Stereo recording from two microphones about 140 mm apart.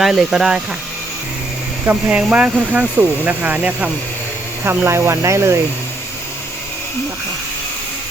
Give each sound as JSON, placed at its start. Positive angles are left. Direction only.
{"t": 0.0, "sound": "speech", "side_deg": -5}
{"t": 1.9, "sound": "speech", "side_deg": -10}